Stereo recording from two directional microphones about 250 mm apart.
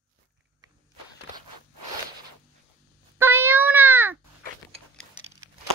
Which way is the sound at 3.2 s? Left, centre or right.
Centre.